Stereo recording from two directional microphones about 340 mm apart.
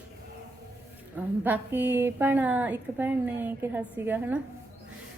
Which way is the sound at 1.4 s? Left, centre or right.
Centre.